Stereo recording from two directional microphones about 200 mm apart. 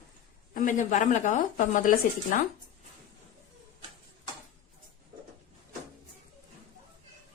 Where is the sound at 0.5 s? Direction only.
40° left (ahead or behind).